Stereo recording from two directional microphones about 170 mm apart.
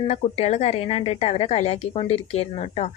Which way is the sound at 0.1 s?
40° left (ahead or behind).